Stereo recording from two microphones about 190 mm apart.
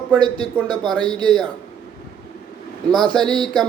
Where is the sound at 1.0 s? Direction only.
20° right (ahead or behind).